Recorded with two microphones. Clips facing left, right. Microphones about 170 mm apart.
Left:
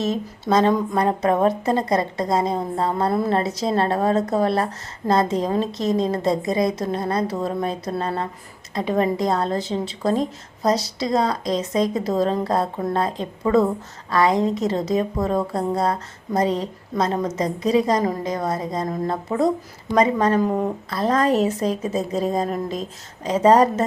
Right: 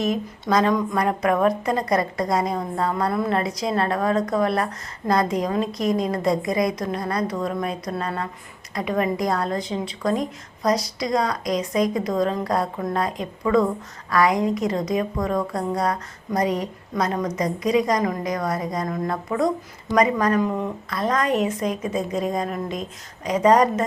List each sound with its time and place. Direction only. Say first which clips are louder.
0.0 s a woman's voice: even; 25° left (ahead or behind)